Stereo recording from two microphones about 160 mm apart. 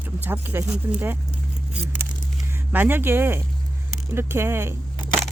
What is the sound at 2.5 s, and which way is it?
Speech, 10° right (ahead or behind).